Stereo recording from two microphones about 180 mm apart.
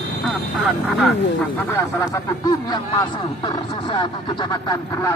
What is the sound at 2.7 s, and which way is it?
Speech, 25° left (ahead or behind).